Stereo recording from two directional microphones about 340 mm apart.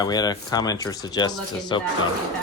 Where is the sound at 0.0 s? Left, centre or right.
Centre.